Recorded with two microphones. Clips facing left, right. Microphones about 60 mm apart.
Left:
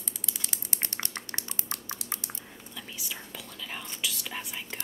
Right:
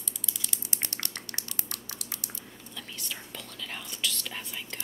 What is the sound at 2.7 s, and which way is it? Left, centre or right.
Whispering, centre.